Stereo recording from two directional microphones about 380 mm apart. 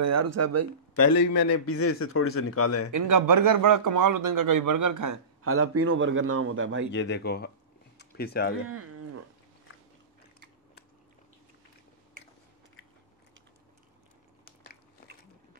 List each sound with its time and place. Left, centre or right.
0.0 s a man's voice: right
1.5 s speech: left
2.9 s a man's voice: right
5.4 s a man's voice: right
6.9 s speech: left
8.6 s livestock: right